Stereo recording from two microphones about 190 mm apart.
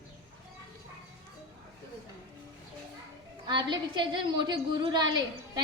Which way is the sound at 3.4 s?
25° right (ahead or behind).